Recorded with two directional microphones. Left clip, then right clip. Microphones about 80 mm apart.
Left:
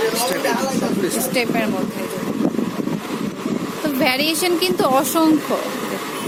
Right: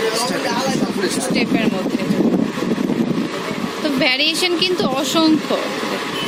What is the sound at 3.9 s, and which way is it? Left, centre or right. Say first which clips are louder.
A woman's voice: right 2 dB; centre.